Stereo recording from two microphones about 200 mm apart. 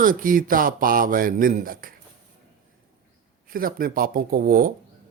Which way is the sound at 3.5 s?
45° right (ahead or behind).